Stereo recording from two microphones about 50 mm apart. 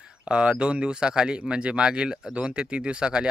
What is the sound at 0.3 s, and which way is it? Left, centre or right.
Speech, right.